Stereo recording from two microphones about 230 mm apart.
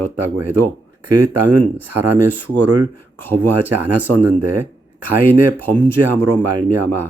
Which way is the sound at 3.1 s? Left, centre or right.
Centre.